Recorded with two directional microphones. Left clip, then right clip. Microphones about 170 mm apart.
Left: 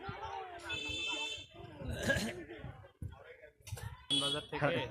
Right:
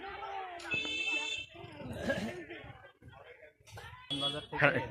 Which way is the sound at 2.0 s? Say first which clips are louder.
Left 1 dB; centre (ahead or behind).